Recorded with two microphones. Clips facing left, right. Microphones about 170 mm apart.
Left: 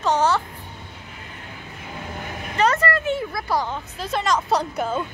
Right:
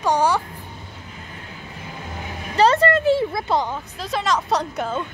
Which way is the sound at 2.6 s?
30° right (ahead or behind).